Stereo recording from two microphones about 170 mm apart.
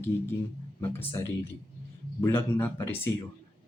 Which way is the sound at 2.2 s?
15° left (ahead or behind).